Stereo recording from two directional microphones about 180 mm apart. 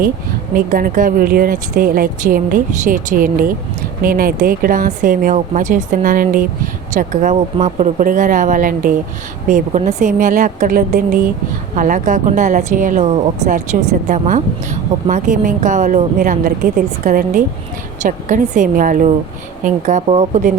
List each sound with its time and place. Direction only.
0.5 s speech: 50° right (ahead or behind)